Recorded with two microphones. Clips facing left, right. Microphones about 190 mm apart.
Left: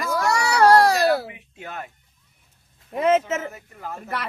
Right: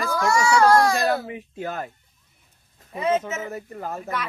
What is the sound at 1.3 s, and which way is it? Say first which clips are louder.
Speech: right 7 dB; 40° right (ahead or behind).